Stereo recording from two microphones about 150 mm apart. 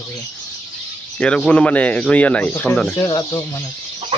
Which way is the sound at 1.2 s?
5° left (ahead or behind).